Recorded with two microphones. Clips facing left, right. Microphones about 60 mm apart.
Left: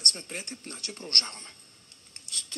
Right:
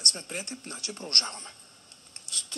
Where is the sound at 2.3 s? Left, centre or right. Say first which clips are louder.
Right 1 dB; left.